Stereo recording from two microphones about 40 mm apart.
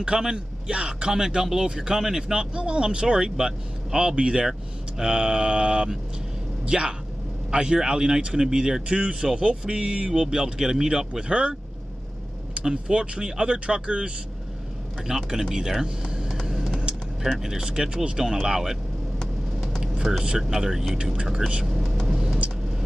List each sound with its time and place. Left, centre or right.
0.0 s a man's voice: centre
4.5 s a man's voice: centre
12.6 s speech: right
15.1 s a man's voice: centre
16.4 s vehicle: centre
17.4 s a man's voice: centre
17.6 s a man's voice: right
19.8 s speech: centre
21.0 s speech: right
22.0 s vehicle: centre